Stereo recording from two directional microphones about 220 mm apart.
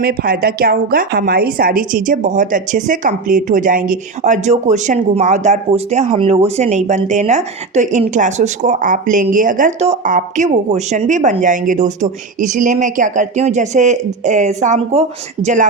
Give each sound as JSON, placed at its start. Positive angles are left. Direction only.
{"t": 0.0, "sound": "a woman's voice", "side_deg": -45}